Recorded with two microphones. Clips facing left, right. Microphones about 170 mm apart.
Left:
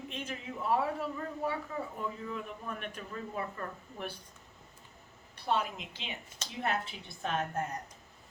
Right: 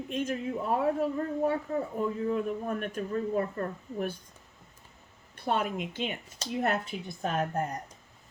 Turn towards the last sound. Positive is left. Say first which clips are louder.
# right 4 dB
turn(degrees=-40)  # may be behind; listen again after turning